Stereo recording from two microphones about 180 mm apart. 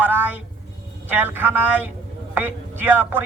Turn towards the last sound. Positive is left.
turn(degrees=-10)  # may be behind; listen again after turning